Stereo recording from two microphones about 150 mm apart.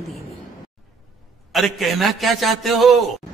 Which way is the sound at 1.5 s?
Centre (ahead or behind).